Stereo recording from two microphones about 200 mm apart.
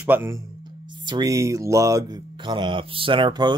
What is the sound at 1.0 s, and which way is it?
Speech, 20° right (ahead or behind).